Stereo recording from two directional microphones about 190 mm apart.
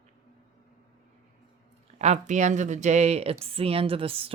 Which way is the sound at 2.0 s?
40° right (ahead or behind).